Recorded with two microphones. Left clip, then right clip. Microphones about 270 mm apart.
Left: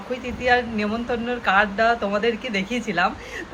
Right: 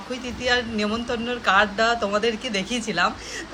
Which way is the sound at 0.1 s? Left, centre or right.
Centre.